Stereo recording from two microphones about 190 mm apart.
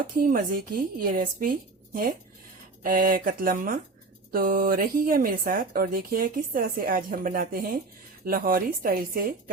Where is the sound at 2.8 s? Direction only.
50° right (ahead or behind).